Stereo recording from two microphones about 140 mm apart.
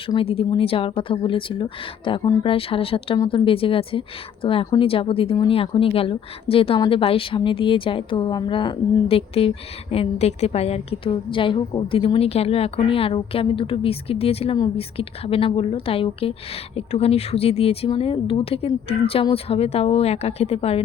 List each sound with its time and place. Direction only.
0.2 s a woman's voice: 40° left (ahead or behind)